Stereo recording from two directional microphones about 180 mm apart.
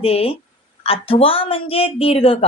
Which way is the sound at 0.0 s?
35° left (ahead or behind).